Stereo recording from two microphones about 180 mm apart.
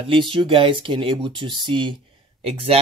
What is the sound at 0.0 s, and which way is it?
Speech, 30° right (ahead or behind).